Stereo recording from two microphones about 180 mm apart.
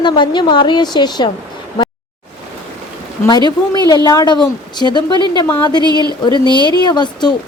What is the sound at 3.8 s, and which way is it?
A woman's voice, 20° left (ahead or behind).